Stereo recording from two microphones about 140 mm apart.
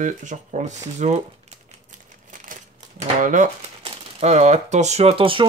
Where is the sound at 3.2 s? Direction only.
65° right (ahead or behind).